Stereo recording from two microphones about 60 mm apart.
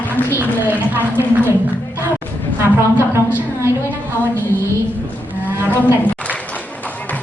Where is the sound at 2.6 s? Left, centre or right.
Right.